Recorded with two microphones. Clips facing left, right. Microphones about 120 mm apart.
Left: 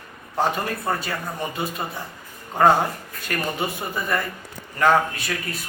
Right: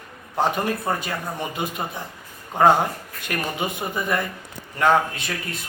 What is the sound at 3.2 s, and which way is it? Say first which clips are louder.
Speech: even; 15° right (ahead or behind).